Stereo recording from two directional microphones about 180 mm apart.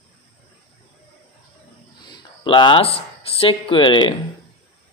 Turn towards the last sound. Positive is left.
turn(degrees=25)  # may be behind; listen again after turning